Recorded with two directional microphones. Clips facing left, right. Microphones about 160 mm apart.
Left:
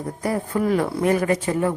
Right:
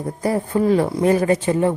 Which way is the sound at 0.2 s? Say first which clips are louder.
Right 4 dB; 25° right (ahead or behind).